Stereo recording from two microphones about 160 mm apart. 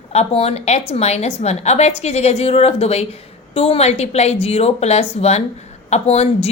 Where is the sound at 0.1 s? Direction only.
40° left (ahead or behind).